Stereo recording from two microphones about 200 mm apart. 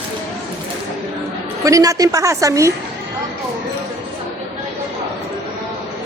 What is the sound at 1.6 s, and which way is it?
A woman's voice, 15° right (ahead or behind).